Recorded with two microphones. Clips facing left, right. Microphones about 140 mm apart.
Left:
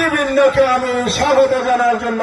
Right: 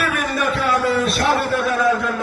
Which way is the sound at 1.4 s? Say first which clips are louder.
Left 7 dB; 70° left (ahead or behind).